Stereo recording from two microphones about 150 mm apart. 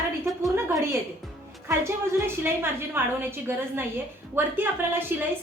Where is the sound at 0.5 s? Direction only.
20° right (ahead or behind).